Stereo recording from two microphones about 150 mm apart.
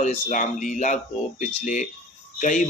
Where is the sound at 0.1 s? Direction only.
60° left (ahead or behind).